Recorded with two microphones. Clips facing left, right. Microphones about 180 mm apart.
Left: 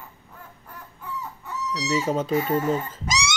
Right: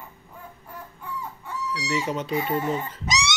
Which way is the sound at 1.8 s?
40° left (ahead or behind).